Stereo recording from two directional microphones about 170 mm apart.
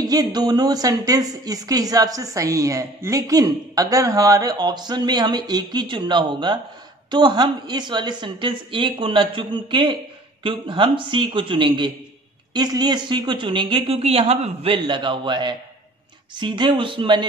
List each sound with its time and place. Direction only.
0.0 s a woman's voice: 20° right (ahead or behind)